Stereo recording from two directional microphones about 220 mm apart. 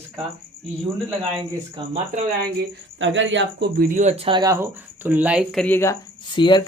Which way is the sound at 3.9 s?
30° right (ahead or behind).